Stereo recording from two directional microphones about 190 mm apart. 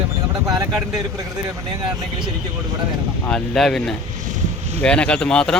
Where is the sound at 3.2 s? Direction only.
5° left (ahead or behind).